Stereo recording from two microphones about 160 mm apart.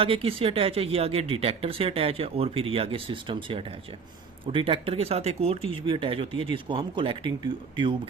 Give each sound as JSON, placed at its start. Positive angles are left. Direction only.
{"t": 0.0, "sound": "speech", "side_deg": -35}